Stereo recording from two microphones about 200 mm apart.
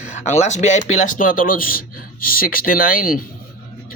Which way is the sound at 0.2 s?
35° left (ahead or behind).